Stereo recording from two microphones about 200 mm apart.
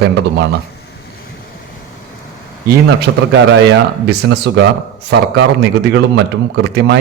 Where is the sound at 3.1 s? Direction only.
90° right.